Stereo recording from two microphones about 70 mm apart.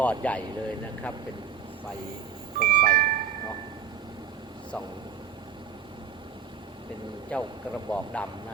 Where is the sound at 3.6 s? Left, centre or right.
Right.